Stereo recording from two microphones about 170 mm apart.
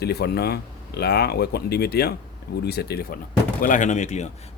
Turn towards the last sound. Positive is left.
turn(degrees=45)  # may be behind; listen again after turning